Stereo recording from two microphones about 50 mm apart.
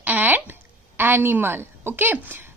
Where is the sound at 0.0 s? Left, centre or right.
Right.